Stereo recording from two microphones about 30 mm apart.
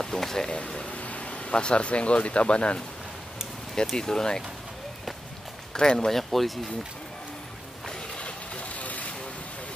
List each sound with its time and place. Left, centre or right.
0.2 s speech: centre
0.5 s a sound: left
0.9 s speech: left
3.9 s speech: left
5.7 s speech: left
5.9 s speech: centre
8.2 s vehicle: left